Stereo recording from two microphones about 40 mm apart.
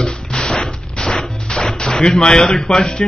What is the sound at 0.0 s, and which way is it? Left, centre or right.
Fusillade, centre.